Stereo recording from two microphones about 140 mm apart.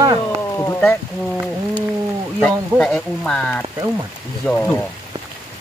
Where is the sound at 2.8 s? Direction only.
5° left (ahead or behind).